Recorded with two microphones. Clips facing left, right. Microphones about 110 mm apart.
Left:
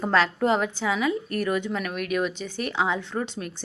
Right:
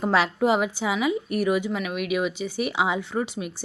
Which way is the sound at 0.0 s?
10° right (ahead or behind).